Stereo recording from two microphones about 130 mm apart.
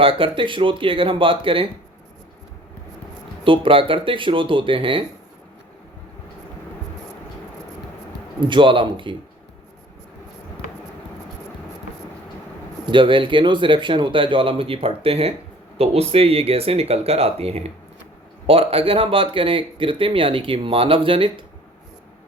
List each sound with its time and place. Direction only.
0.0 s speech: 45° right (ahead or behind)
3.4 s speech: 40° right (ahead or behind)
8.4 s speech: 40° right (ahead or behind)
12.8 s speech: 40° right (ahead or behind)